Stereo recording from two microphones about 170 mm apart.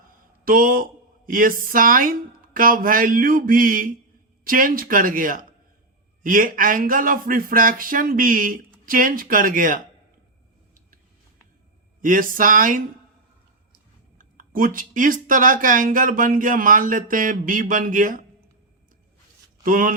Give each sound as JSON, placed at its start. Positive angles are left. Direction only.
{"t": 0.4, "sound": "speech", "side_deg": -55}
{"t": 11.9, "sound": "speech", "side_deg": -55}
{"t": 14.2, "sound": "speech", "side_deg": -55}
{"t": 19.6, "sound": "speech", "side_deg": -55}